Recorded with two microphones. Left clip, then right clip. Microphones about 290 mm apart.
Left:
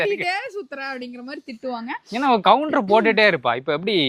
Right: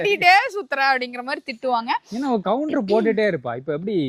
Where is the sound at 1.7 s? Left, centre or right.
Right.